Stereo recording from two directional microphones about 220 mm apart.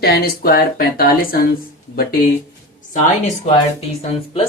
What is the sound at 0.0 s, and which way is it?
Speech, 45° left (ahead or behind).